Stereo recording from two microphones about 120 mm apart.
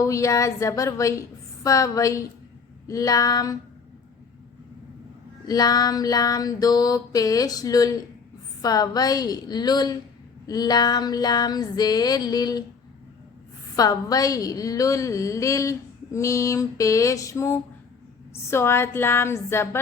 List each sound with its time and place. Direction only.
0.0 s a woman's voice: 25° left (ahead or behind)
5.5 s a sound: 35° left (ahead or behind)
13.7 s a woman's voice: 30° left (ahead or behind)